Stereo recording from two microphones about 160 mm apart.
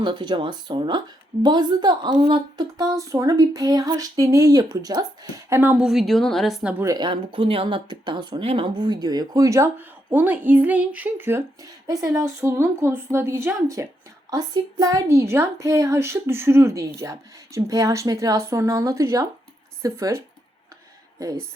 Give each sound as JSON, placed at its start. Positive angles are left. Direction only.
{"t": 0.0, "sound": "speech", "side_deg": -30}
{"t": 5.5, "sound": "a woman's voice", "side_deg": -10}
{"t": 6.8, "sound": "a woman's voice", "side_deg": -25}